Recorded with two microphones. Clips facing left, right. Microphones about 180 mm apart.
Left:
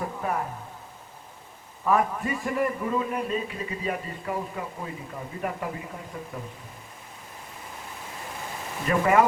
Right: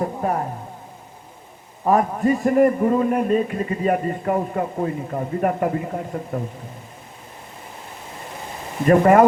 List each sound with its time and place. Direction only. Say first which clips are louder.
0.0 s a sound: right 7 dB; 40° right (ahead or behind)
1.8 s a man's voice: right 6 dB; 40° right (ahead or behind)
8.9 s a man's voice: right 8 dB; 50° right (ahead or behind)